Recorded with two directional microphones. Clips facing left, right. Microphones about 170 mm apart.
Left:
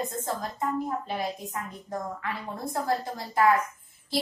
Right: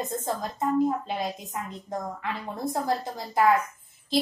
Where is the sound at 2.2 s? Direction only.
20° right (ahead or behind).